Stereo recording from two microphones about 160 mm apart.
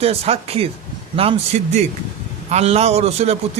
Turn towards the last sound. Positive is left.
turn(degrees=-40)  # may be behind; listen again after turning